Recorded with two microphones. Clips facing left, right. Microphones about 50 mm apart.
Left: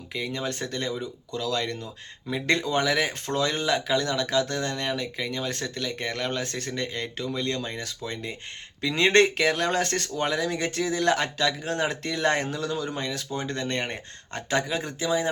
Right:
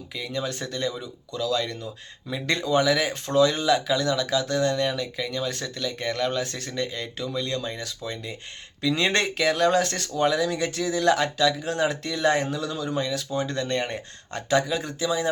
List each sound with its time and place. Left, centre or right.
0.1 s speech: left